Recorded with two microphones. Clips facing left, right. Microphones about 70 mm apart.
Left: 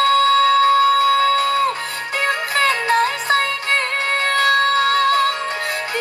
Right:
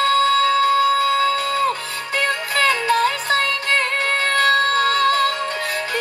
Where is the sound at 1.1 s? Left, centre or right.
Left.